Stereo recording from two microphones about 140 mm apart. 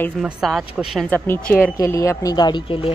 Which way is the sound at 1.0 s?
15° left (ahead or behind).